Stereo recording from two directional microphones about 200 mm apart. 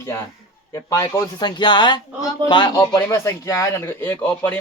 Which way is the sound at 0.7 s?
15° left (ahead or behind).